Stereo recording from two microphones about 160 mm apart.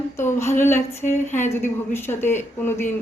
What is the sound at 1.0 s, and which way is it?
Speech, 50° left (ahead or behind).